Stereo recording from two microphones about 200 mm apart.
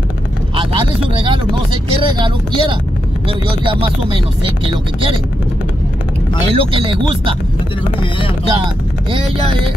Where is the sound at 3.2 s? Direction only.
25° right (ahead or behind).